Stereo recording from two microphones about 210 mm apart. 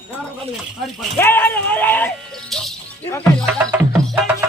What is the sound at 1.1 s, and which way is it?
Speech, 10° left (ahead or behind).